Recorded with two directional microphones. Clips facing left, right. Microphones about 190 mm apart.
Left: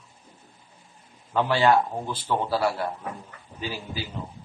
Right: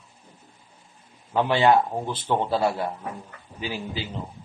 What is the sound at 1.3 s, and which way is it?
A man's voice, 20° right (ahead or behind).